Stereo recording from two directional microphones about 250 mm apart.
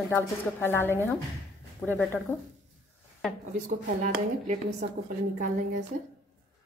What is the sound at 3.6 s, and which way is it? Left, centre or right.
Speech, right.